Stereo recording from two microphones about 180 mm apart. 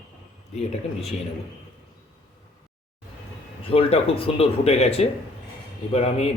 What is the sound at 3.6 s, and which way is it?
Speech, 30° left (ahead or behind).